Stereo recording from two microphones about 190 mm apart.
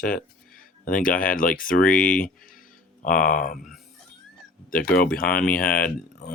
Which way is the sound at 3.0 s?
45° left (ahead or behind).